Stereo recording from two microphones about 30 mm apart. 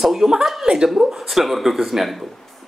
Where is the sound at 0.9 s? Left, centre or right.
Centre.